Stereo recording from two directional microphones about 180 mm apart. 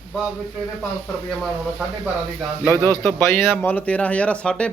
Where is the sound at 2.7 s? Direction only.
15° left (ahead or behind).